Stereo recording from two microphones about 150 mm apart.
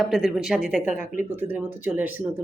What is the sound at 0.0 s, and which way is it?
Speech, centre (ahead or behind).